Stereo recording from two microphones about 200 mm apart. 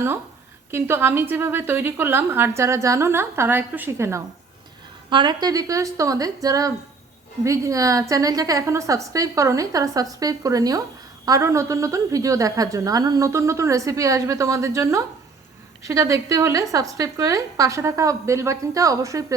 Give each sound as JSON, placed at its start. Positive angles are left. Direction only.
{"t": 0.7, "sound": "a woman's voice", "side_deg": -10}